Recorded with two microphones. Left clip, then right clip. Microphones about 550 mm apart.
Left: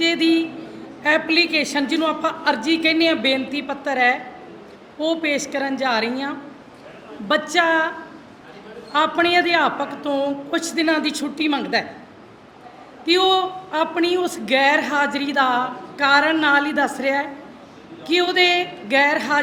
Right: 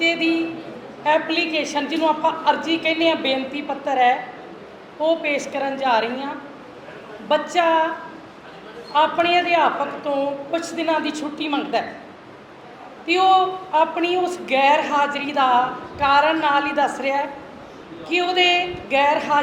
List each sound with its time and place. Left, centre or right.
0.0 s a sound: left
1.0 s a man's voice: left
7.3 s a man's voice: left
8.9 s a man's voice: left
13.1 s a man's voice: left